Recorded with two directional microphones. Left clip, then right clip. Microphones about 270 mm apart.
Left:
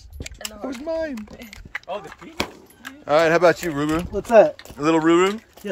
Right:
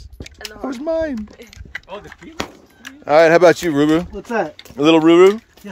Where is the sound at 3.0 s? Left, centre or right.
Centre.